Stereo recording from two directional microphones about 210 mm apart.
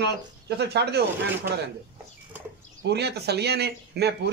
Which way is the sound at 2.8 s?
50° right (ahead or behind).